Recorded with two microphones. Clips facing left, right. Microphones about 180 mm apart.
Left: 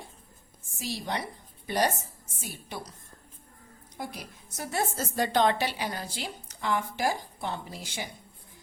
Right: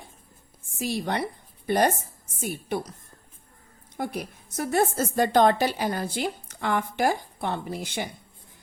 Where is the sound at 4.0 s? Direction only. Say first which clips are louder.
Right 8 dB; 60° right (ahead or behind).